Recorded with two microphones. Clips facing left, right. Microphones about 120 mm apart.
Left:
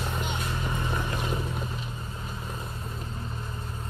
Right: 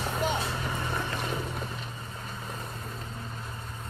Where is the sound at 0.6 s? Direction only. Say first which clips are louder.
Left 1 dB; centre (ahead or behind).